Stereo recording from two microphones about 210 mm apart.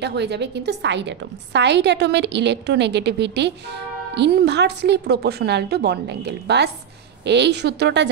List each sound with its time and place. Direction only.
0.0 s a woman's voice: 55° right (ahead or behind)